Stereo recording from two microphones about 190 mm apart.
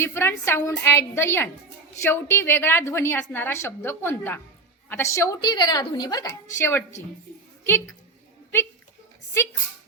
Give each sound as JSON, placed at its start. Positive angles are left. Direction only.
{"t": 0.0, "sound": "a woman's voice", "side_deg": 15}